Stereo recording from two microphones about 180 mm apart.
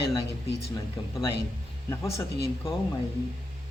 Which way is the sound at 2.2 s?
15° left (ahead or behind).